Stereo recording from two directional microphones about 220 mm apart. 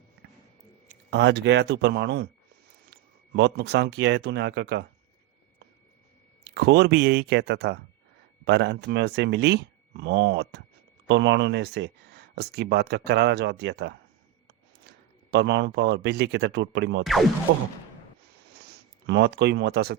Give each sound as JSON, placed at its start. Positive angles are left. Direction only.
{"t": 1.1, "sound": "speech", "side_deg": -50}
{"t": 6.4, "sound": "speech", "side_deg": -50}
{"t": 17.0, "sound": "music", "side_deg": 0}
{"t": 17.5, "sound": "speech", "side_deg": -50}
{"t": 19.0, "sound": "speech", "side_deg": -50}